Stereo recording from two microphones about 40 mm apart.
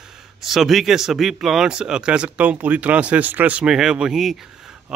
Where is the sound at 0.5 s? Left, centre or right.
Centre; by 3.5 s right.